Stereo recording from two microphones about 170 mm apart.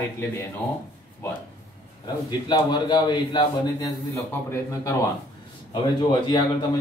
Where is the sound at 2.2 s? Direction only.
25° left (ahead or behind).